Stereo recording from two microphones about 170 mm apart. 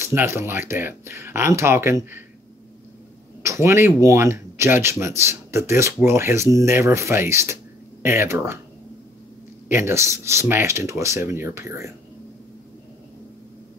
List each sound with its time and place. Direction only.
0.0 s speech: 15° right (ahead or behind)
3.4 s speech: 15° right (ahead or behind)
9.7 s speech: 15° right (ahead or behind)